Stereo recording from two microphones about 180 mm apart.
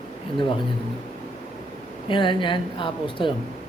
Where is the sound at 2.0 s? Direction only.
25° left (ahead or behind).